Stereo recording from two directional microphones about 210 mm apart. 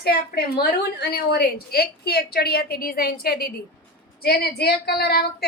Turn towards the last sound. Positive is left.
turn(degrees=50)  # may be behind; listen again after turning